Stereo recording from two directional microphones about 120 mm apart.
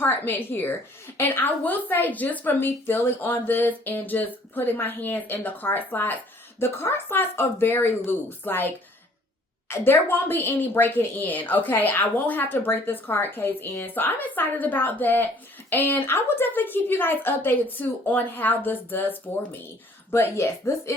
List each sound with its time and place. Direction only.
0.0 s a woman's voice: 15° left (ahead or behind)